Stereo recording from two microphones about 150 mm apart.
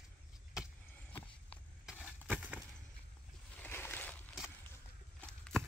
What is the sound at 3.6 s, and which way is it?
Boat, 15° left (ahead or behind).